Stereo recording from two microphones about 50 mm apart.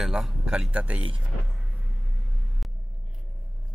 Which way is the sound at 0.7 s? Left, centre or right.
Right.